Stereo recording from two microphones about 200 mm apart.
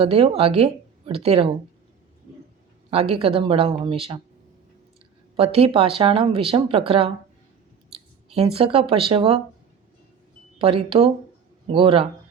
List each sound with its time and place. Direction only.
0.0 s speech: 30° right (ahead or behind)
2.9 s speech: 30° right (ahead or behind)
5.4 s speech: 30° right (ahead or behind)
10.6 s speech: 25° right (ahead or behind)